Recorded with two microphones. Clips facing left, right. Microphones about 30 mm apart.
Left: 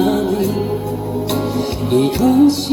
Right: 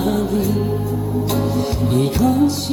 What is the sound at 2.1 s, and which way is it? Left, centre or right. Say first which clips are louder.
Music: left 4 dB; left.